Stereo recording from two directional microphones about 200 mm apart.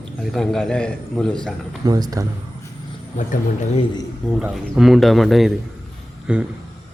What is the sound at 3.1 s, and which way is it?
Speech, 40° left (ahead or behind).